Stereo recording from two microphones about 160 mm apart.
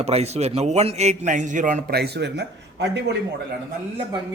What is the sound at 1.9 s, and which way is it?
A man's voice, 90° right.